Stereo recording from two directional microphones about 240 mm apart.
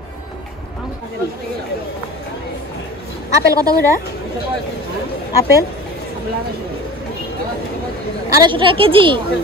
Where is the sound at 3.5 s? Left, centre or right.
Centre.